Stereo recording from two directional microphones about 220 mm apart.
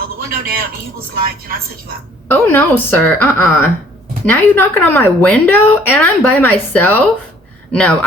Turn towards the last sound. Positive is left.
turn(degrees=5)  # may be behind; listen again after turning